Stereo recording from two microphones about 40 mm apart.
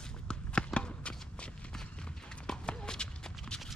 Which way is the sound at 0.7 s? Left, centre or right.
Left.